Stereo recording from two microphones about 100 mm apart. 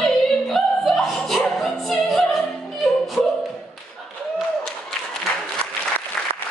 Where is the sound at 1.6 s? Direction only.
Centre (ahead or behind).